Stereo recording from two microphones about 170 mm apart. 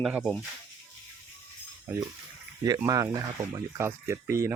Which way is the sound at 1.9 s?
10° right (ahead or behind).